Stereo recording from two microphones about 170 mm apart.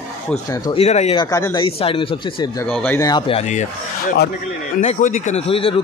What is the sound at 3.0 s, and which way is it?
Speech, 25° left (ahead or behind).